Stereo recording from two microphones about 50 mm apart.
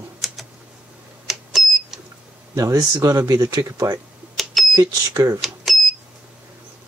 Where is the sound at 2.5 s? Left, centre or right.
Right.